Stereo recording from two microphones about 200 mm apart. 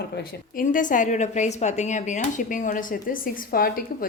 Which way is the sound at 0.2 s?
45° left (ahead or behind).